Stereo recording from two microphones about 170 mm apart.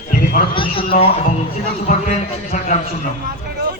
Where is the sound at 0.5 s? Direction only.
30° left (ahead or behind).